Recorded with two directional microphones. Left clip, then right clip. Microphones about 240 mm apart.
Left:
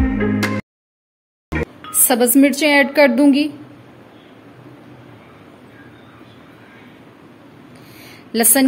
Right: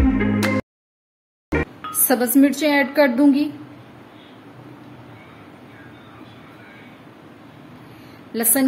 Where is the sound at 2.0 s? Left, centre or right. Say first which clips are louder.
Left 3 dB; left.